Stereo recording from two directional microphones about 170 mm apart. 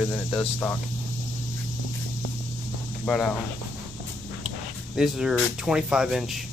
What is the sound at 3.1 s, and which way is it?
Speech, 5° left (ahead or behind).